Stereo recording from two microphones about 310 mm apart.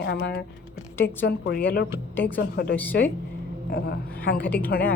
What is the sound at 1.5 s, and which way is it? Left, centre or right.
A woman's voice, left.